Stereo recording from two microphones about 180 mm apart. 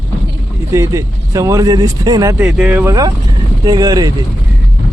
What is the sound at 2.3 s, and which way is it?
Speech, 5° right (ahead or behind).